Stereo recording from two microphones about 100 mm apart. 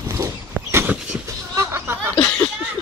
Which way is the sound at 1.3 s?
25° right (ahead or behind).